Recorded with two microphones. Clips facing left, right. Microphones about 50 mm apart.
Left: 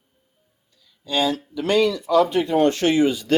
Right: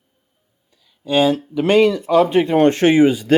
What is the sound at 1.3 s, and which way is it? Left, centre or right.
Speech, right.